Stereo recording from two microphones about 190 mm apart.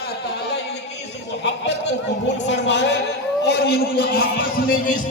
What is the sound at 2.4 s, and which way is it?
A man's voice, 65° left (ahead or behind).